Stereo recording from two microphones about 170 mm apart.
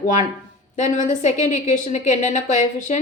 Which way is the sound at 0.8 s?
45° left (ahead or behind).